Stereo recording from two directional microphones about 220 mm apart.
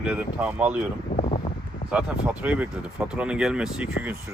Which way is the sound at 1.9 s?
5° right (ahead or behind).